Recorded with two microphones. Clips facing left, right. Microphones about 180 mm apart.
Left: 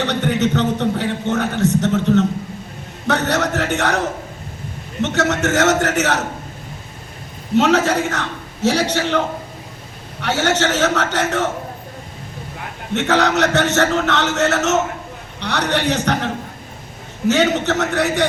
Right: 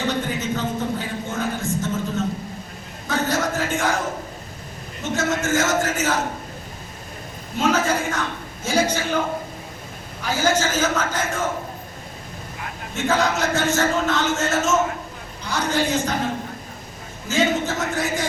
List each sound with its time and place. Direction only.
0.0 s a sound: 70° left (ahead or behind)
5.0 s a man's voice: 70° left (ahead or behind)
7.5 s a man's voice: 70° left (ahead or behind)
12.9 s a man's voice: 70° left (ahead or behind)